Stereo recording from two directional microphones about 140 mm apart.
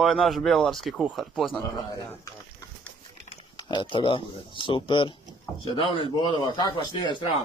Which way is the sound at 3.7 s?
35° left (ahead or behind).